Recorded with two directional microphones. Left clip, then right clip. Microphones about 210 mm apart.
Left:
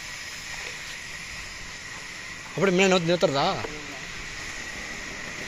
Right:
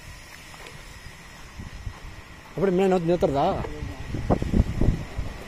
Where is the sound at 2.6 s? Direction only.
15° right (ahead or behind).